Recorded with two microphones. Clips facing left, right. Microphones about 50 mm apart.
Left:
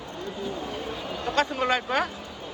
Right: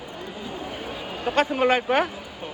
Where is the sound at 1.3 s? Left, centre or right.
Centre.